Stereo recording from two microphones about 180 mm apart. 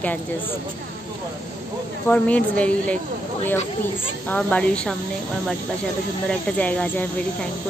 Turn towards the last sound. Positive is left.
turn(degrees=10)  # may be behind; listen again after turning